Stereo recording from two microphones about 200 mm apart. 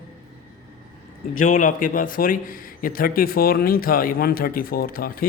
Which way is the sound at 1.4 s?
40° left (ahead or behind).